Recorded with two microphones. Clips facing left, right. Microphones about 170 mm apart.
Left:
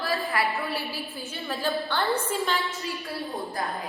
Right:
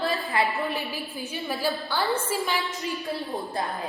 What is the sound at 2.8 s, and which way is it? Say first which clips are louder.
Speech: right 3 dB; 20° right (ahead or behind).